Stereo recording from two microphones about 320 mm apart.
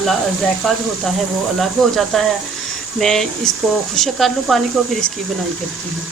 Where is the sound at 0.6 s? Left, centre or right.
Centre.